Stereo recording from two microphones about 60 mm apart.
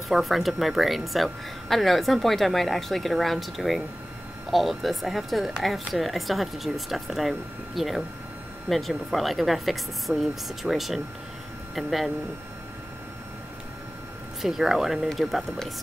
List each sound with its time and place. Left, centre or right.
0.1 s a woman's voice: centre
14.4 s a woman's voice: centre